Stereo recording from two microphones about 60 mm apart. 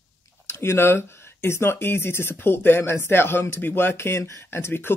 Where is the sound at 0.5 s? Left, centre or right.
Left.